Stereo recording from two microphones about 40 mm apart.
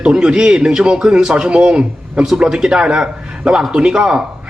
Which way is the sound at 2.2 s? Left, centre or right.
Centre.